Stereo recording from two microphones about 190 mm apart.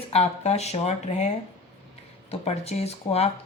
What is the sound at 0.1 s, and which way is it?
A woman's voice, 35° left (ahead or behind).